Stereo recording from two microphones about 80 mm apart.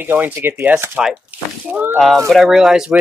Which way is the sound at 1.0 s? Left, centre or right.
Centre.